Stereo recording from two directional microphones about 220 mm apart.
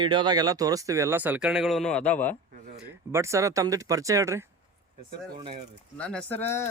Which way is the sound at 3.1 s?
10° right (ahead or behind).